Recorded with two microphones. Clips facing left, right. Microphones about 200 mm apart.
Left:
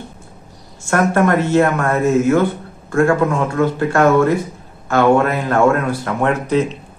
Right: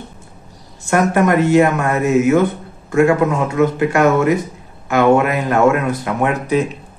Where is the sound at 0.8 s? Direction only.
15° right (ahead or behind).